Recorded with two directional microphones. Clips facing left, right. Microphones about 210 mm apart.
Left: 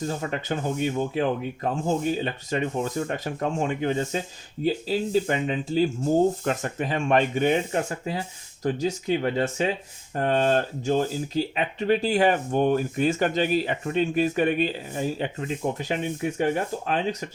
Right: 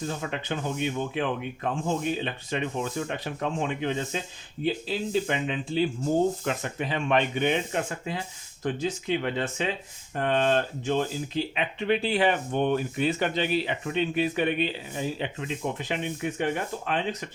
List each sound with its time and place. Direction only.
0.1 s speech: 40° left (ahead or behind)